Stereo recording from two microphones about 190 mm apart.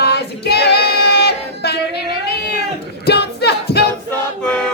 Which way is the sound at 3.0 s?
60° left (ahead or behind).